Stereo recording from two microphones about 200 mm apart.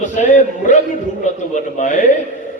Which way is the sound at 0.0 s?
40° left (ahead or behind).